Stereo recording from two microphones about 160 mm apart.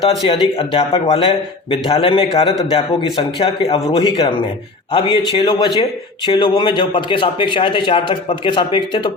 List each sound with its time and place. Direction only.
0.3 s a man's voice: 35° left (ahead or behind)